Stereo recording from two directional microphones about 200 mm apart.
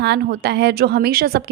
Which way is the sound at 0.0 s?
55° right (ahead or behind).